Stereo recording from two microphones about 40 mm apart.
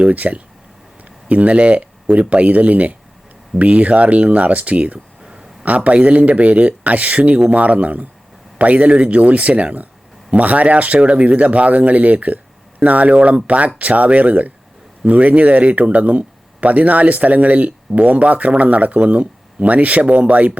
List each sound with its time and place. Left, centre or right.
0.0 s speech: right
5.2 s a sound: centre
5.6 s speech: right